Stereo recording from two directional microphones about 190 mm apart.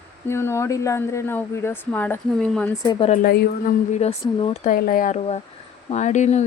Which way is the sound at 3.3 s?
50° left (ahead or behind).